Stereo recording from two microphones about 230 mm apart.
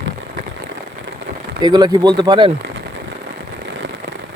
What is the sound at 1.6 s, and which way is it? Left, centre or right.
Speech, centre.